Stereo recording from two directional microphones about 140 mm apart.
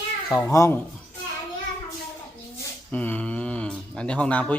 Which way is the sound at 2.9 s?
10° left (ahead or behind).